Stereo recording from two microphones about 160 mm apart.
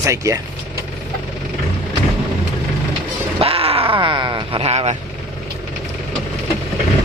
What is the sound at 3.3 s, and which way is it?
Groan, 35° right (ahead or behind).